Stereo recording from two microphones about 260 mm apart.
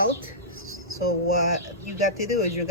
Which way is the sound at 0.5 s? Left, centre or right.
Left.